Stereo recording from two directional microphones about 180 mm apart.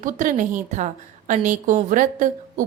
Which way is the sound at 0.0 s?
45° right (ahead or behind).